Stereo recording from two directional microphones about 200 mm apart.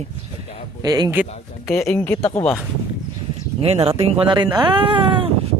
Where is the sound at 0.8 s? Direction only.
20° right (ahead or behind).